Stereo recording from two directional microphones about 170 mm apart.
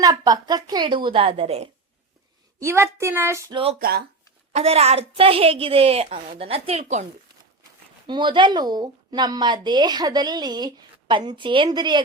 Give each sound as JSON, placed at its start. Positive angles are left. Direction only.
{"t": 0.0, "sound": "speech", "side_deg": -25}
{"t": 2.6, "sound": "speech", "side_deg": -15}
{"t": 3.5, "sound": "a woman's voice", "side_deg": -35}
{"t": 3.8, "sound": "speech", "side_deg": -65}
{"t": 4.5, "sound": "a woman's voice", "side_deg": -35}
{"t": 8.0, "sound": "speech", "side_deg": -25}